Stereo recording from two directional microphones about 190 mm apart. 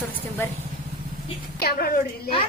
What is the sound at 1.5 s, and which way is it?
Speech, 55° left (ahead or behind).